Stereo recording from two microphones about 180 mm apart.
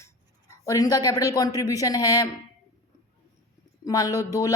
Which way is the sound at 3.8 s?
20° left (ahead or behind).